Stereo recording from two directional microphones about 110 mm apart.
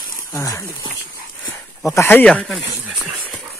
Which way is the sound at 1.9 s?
20° left (ahead or behind).